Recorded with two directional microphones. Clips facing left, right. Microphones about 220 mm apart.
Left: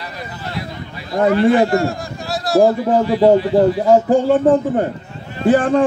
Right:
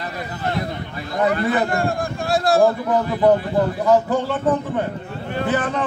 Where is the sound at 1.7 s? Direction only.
55° right (ahead or behind).